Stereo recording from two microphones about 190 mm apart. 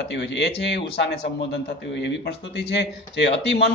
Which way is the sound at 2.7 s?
65° left (ahead or behind).